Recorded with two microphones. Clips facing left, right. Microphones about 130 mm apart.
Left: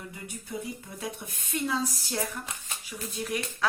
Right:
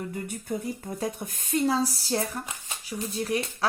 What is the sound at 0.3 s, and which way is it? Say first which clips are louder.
A woman's voice: right 5 dB; 50° right (ahead or behind).